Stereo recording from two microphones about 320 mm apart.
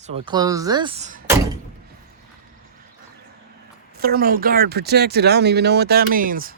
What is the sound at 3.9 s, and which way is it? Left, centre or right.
Speech, right.